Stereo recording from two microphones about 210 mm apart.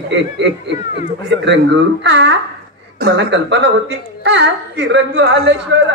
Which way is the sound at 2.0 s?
55° right (ahead or behind).